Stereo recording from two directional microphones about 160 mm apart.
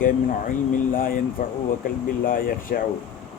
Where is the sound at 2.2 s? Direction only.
65° left (ahead or behind).